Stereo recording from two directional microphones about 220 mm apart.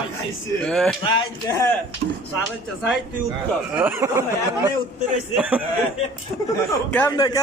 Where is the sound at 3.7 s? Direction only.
10° right (ahead or behind).